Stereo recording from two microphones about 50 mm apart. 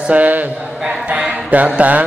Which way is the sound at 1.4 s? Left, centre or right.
Right.